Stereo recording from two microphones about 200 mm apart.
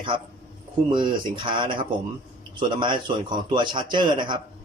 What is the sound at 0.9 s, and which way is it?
A man's voice, 25° right (ahead or behind).